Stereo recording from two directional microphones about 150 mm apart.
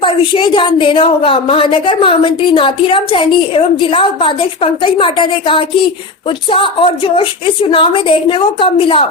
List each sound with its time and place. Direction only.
0.0 s a woman's voice: 35° left (ahead or behind)